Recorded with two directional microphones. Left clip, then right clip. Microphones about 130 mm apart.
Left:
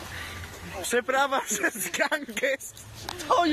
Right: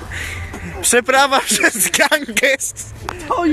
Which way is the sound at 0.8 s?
20° right (ahead or behind).